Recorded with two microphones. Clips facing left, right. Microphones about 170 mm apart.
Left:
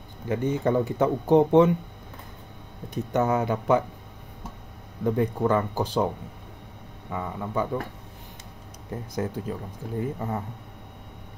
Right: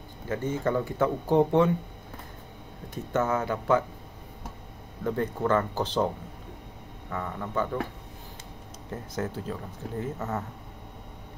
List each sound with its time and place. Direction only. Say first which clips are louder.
0.3 s speech: left 4 dB; 15° left (ahead or behind)
2.9 s speech: left 3 dB; 15° left (ahead or behind)
5.0 s speech: left 4 dB; 15° left (ahead or behind)
7.1 s speech: left 2 dB; 10° left (ahead or behind)
8.9 s speech: left 3 dB; 10° left (ahead or behind)